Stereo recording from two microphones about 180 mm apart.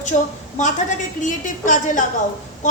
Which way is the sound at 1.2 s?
45° left (ahead or behind).